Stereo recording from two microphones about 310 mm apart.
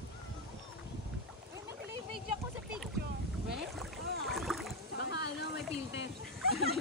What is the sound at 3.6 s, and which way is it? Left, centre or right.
Rowboat, centre.